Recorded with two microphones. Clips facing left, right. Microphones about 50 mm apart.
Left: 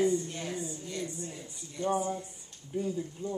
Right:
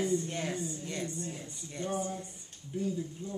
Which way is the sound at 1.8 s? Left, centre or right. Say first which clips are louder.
Left 5 dB; centre.